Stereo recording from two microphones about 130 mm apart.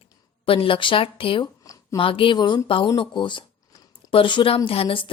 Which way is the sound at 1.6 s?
25° left (ahead or behind).